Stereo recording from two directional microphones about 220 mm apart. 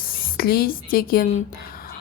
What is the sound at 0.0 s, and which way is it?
Speech, 40° left (ahead or behind).